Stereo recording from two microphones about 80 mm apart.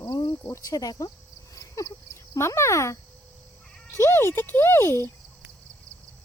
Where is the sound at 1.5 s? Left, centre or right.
Left.